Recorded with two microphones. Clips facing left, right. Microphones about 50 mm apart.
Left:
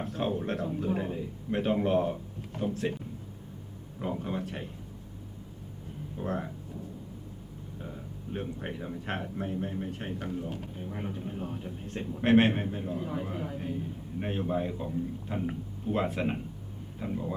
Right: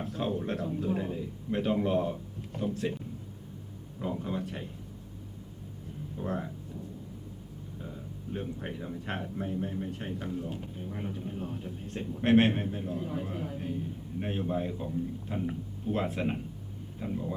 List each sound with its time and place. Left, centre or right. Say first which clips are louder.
0.0 s a man's voice: left 1 dB; centre
4.0 s a sound: even; left
6.2 s speech: left 1 dB; centre
7.8 s speech: left 1 dB; centre